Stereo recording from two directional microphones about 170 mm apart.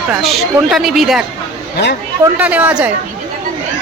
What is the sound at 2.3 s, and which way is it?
Speech, 10° right (ahead or behind).